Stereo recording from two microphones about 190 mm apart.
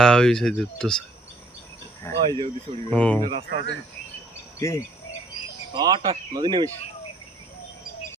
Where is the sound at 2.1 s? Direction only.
15° left (ahead or behind).